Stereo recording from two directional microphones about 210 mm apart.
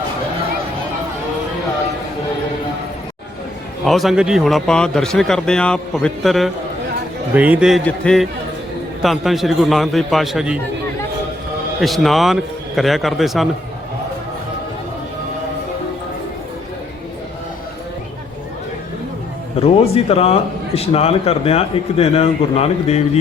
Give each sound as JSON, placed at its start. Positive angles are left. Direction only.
{"t": 3.8, "sound": "a man's voice", "side_deg": 0}
{"t": 11.8, "sound": "a man's voice", "side_deg": 0}
{"t": 19.5, "sound": "speech", "side_deg": 30}